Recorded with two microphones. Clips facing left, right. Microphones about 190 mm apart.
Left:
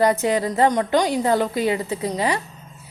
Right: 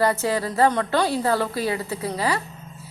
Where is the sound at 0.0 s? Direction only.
20° left (ahead or behind).